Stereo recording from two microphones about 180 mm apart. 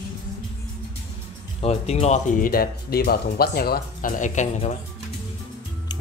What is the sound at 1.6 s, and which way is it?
Speech, 35° left (ahead or behind).